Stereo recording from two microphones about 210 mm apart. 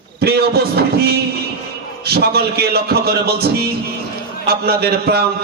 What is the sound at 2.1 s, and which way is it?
Speech, 50° right (ahead or behind).